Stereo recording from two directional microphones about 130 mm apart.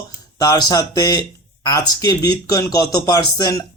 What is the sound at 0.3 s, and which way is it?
A man's voice, 30° left (ahead or behind).